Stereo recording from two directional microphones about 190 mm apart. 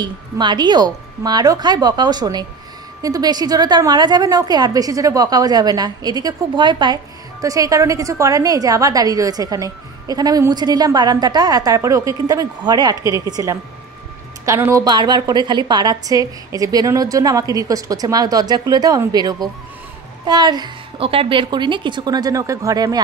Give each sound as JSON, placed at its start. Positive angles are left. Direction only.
{"t": 0.0, "sound": "a woman's voice", "side_deg": -25}